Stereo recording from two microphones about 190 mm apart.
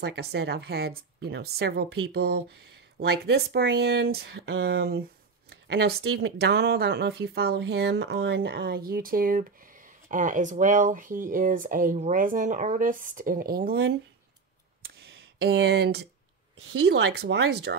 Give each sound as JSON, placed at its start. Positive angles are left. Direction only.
{"t": 0.0, "sound": "a woman's voice", "side_deg": -60}
{"t": 14.8, "sound": "a sound", "side_deg": -60}
{"t": 16.8, "sound": "a woman's voice", "side_deg": -65}